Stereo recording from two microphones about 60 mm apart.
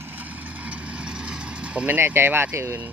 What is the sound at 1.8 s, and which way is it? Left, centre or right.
Speech, right.